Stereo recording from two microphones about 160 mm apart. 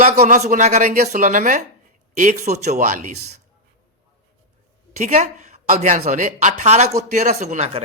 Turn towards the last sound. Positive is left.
turn(degrees=-45)  # may be behind; listen again after turning